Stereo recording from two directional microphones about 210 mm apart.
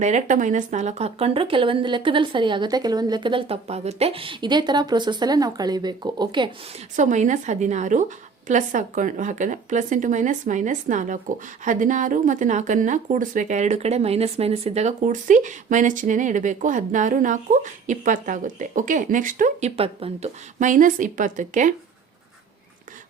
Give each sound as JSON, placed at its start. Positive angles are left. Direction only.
{"t": 0.0, "sound": "speech", "side_deg": -35}
{"t": 6.9, "sound": "speech", "side_deg": -35}